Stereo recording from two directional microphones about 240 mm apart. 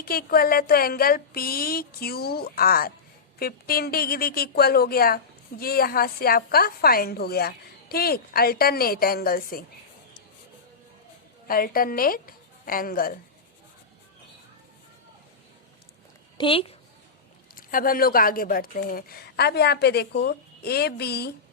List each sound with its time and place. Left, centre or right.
0.0 s speech: left
11.4 s a woman's voice: left
16.4 s a woman's voice: left
17.5 s speech: left